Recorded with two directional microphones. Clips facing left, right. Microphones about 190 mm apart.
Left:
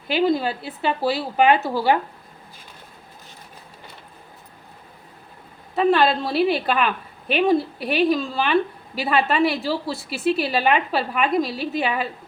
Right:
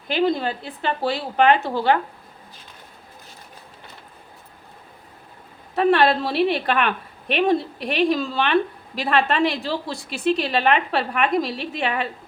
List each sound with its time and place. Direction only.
0.1 s a woman's voice: 5° left (ahead or behind)
5.7 s a woman's voice: centre (ahead or behind)